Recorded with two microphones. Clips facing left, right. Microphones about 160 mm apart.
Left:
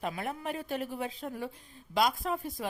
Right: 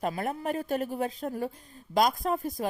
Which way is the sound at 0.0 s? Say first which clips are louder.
Right 5 dB; 45° right (ahead or behind).